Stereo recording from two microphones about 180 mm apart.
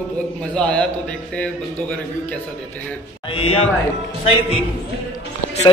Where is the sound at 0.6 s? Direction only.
5° left (ahead or behind).